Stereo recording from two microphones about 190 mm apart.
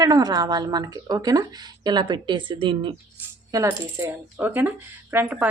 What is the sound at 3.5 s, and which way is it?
Speech, 15° right (ahead or behind).